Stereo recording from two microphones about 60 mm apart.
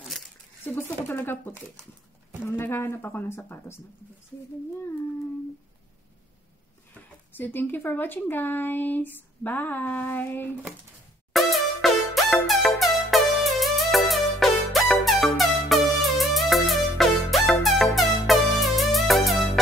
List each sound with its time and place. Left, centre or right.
0.7 s speech: left
7.3 s speech: left
11.3 s music: centre